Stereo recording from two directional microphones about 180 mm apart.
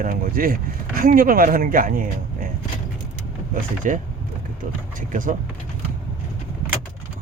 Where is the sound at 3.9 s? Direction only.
45° right (ahead or behind).